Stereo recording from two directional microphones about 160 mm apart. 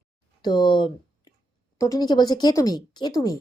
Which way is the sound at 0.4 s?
25° left (ahead or behind).